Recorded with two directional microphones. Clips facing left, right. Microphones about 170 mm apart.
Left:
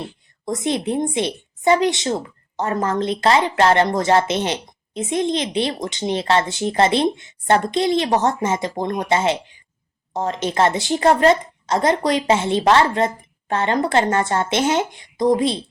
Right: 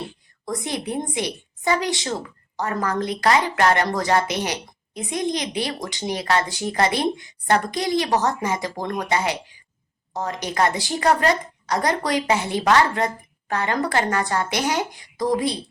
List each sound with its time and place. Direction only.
0.4 s a woman's voice: 20° left (ahead or behind)